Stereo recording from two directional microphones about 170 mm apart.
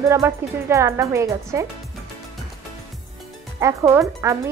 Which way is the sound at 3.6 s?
15° right (ahead or behind).